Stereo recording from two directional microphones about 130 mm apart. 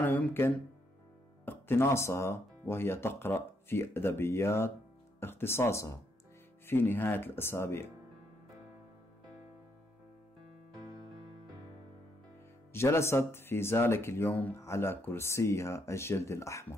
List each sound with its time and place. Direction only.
0.0 s speech: 15° left (ahead or behind)
12.7 s speech: 20° left (ahead or behind)